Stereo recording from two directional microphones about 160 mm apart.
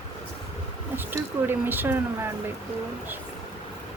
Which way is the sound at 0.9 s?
15° right (ahead or behind).